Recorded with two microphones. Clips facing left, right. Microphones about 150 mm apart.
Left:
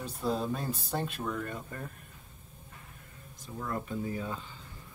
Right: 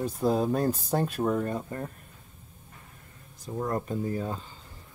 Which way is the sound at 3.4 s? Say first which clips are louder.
Right 6 dB; 40° right (ahead or behind).